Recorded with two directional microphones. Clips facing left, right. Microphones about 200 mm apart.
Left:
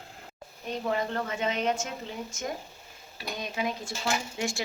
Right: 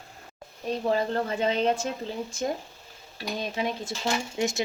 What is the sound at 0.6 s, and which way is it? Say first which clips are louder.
Speech: right 4 dB; 35° right (ahead or behind).